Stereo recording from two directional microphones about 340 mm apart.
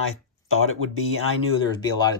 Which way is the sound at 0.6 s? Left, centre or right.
Left.